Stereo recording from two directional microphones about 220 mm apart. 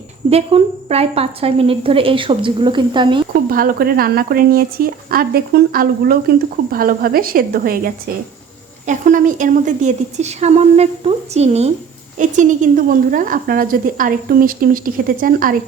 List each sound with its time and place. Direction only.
0.3 s speech: 25° right (ahead or behind)
3.5 s speech: 40° right (ahead or behind)